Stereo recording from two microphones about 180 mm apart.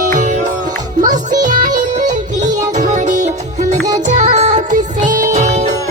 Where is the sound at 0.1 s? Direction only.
45° right (ahead or behind).